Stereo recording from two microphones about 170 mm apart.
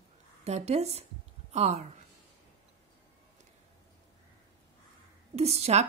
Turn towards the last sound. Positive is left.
turn(degrees=-40)  # may be behind; listen again after turning